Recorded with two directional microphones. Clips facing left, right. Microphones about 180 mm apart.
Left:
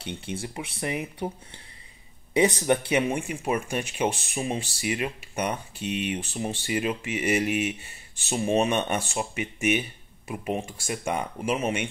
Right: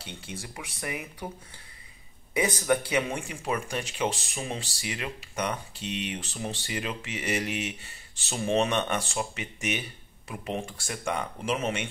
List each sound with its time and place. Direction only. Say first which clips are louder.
0.0 s speech: left 7 dB; 30° left (ahead or behind)
2.3 s speech: left 4 dB; 30° left (ahead or behind)